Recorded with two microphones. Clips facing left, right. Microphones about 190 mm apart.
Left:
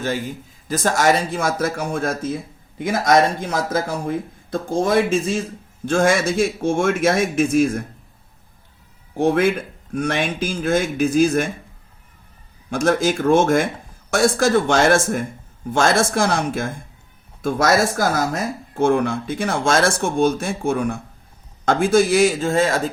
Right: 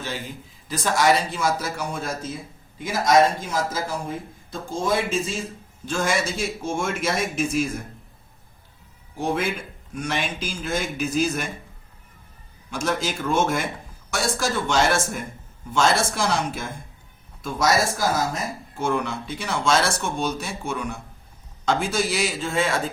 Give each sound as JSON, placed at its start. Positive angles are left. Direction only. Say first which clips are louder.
{"t": 0.7, "sound": "speech", "louder": "left 3 dB", "side_deg": 45}
{"t": 9.1, "sound": "speech", "louder": "left 8 dB", "side_deg": 60}
{"t": 12.7, "sound": "speech", "louder": "left 8 dB", "side_deg": 50}